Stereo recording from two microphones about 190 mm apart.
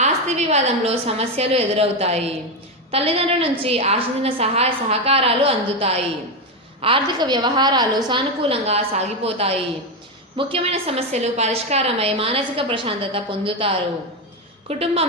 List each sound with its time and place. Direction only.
0.0 s a woman's voice: 35° right (ahead or behind)